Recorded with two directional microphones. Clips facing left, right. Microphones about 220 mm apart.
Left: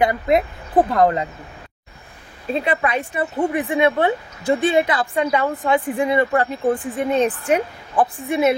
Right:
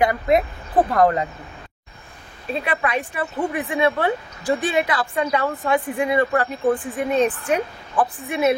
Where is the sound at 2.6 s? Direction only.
25° left (ahead or behind).